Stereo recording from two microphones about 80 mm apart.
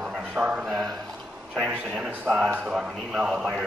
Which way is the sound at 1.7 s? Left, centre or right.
Right.